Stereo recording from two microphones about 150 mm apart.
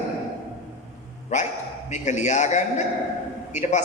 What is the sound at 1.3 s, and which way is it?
A woman's voice, 50° left (ahead or behind).